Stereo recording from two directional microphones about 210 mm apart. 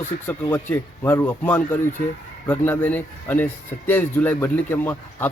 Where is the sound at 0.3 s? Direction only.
10° left (ahead or behind).